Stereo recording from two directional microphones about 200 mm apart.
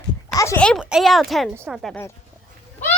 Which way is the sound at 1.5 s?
10° right (ahead or behind).